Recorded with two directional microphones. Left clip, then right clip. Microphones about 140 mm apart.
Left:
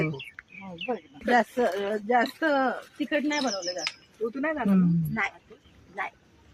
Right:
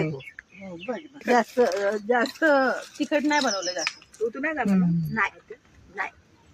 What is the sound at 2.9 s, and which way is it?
Speech, 20° right (ahead or behind).